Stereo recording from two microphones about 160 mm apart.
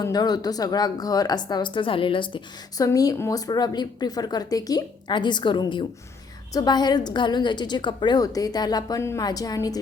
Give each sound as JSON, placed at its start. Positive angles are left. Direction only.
{"t": 0.0, "sound": "a woman's voice", "side_deg": 25}